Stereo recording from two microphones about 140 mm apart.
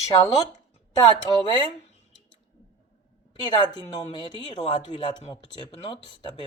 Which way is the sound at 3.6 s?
30° left (ahead or behind).